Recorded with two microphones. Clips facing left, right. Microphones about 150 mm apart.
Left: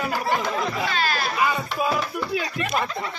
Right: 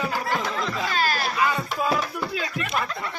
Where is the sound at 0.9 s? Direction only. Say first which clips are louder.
Even; 45° right (ahead or behind).